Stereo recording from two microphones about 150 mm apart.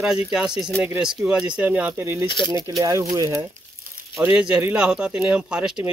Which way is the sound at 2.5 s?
20° right (ahead or behind).